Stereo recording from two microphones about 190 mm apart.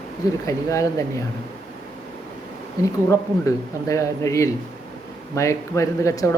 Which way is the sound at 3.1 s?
15° left (ahead or behind).